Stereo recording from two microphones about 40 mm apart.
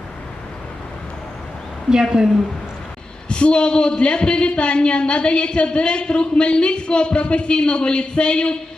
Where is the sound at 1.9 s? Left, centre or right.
Centre.